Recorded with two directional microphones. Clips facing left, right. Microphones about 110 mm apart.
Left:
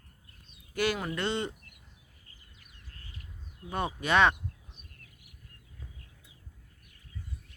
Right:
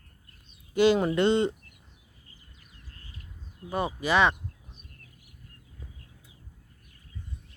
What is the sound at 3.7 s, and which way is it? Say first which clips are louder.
Speech: right 2 dB; centre (ahead or behind).